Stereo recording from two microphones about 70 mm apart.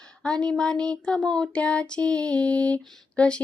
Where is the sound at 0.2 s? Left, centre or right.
Centre.